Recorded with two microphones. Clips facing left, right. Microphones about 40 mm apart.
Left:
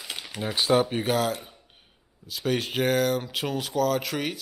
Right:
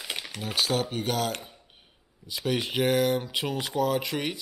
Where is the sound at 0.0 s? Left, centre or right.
Centre.